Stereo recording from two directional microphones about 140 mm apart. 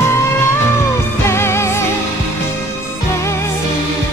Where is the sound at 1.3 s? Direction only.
20° left (ahead or behind).